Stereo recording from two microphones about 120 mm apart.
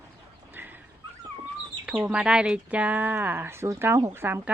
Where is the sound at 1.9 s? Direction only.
10° right (ahead or behind).